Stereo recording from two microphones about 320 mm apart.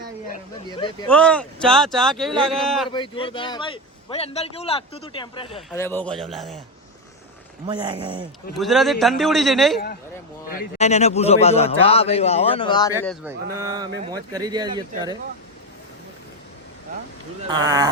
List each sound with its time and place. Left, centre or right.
1.1 s a man's voice: centre
2.9 s a man's voice: centre
5.5 s a man's voice: centre
7.7 s speech: centre
8.5 s a man's voice: centre
10.5 s a man's voice: left
13.1 s speech: centre
17.5 s speech: centre